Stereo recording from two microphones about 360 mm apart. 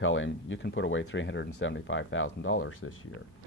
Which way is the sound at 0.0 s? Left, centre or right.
Left.